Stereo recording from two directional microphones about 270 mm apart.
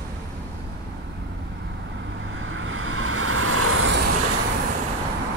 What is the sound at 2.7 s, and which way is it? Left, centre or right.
Vehicle, right.